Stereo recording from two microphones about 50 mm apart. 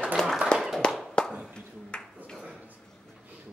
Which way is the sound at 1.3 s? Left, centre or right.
Right.